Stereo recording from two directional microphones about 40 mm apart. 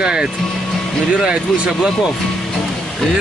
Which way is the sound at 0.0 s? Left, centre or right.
Right.